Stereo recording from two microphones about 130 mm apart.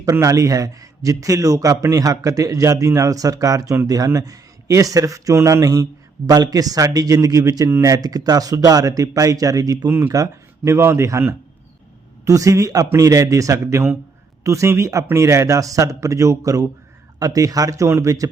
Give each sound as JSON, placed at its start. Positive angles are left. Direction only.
{"t": 0.0, "sound": "a man's voice", "side_deg": -25}